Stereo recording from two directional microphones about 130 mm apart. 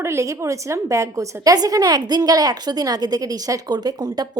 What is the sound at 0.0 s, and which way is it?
A woman's voice, 20° right (ahead or behind).